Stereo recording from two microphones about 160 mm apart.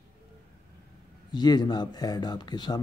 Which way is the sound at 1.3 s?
25° left (ahead or behind).